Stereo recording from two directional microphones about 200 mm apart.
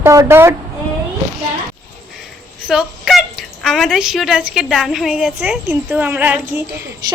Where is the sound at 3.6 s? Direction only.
Centre (ahead or behind).